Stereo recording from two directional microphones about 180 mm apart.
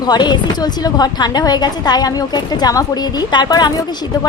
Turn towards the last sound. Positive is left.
turn(degrees=20)  # may be behind; listen again after turning